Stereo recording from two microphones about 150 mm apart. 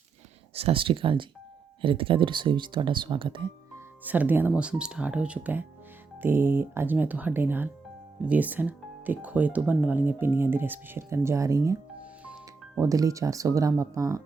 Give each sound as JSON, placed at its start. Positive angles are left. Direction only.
{"t": 0.5, "sound": "speech", "side_deg": -40}
{"t": 4.0, "sound": "speech", "side_deg": -10}
{"t": 12.2, "sound": "music", "side_deg": -5}
{"t": 12.8, "sound": "speech", "side_deg": -20}